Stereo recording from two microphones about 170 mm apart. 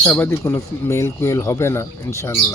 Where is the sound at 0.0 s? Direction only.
10° left (ahead or behind).